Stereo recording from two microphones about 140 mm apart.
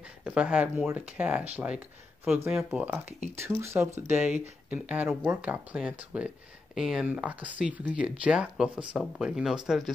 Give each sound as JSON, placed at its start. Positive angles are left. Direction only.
{"t": 0.2, "sound": "speech", "side_deg": -10}
{"t": 2.5, "sound": "speech", "side_deg": -10}